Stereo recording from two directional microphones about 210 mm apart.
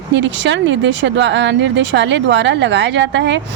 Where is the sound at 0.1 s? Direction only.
60° right (ahead or behind).